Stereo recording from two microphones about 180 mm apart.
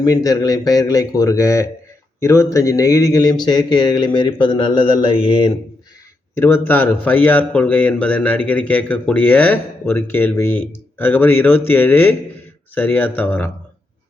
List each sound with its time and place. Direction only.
0.0 s speech: 20° left (ahead or behind)
6.3 s speech: 10° left (ahead or behind)